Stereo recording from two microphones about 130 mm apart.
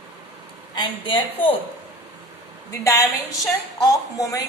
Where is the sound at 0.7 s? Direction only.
40° left (ahead or behind).